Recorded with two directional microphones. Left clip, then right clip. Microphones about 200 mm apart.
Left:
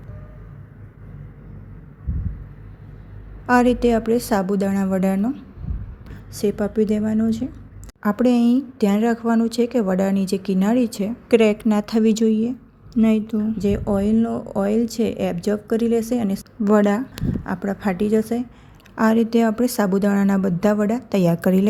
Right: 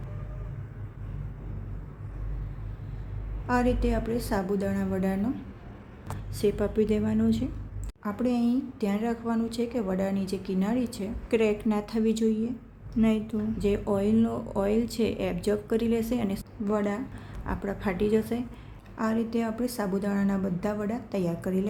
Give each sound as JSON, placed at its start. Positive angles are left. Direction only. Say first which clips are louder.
{"t": 3.4, "sound": "a woman's voice", "louder": "left 10 dB", "side_deg": 35}
{"t": 6.3, "sound": "speech", "louder": "left 5 dB", "side_deg": 30}
{"t": 8.0, "sound": "a woman's voice", "louder": "left 10 dB", "side_deg": 40}
{"t": 16.6, "sound": "a woman's voice", "louder": "left 11 dB", "side_deg": 40}
{"t": 17.4, "sound": "speech", "louder": "left 5 dB", "side_deg": 30}
{"t": 18.9, "sound": "a woman's voice", "louder": "left 11 dB", "side_deg": 40}